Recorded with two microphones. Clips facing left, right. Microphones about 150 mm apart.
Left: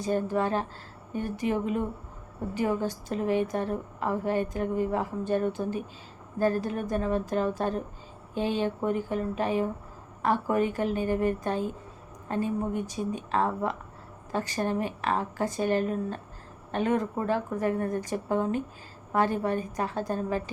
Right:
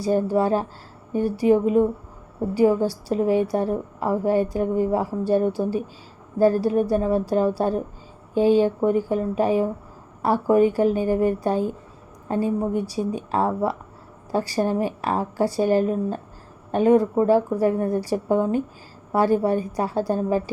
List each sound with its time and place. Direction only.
0.0 s a woman's voice: 35° right (ahead or behind)